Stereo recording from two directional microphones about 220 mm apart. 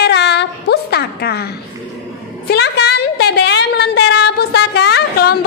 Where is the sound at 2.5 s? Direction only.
50° left (ahead or behind).